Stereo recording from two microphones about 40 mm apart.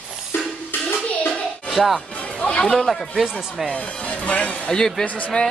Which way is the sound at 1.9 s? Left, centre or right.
Left.